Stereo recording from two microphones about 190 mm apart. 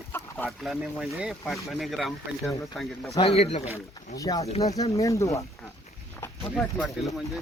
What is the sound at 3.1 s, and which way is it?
Speech, 30° left (ahead or behind).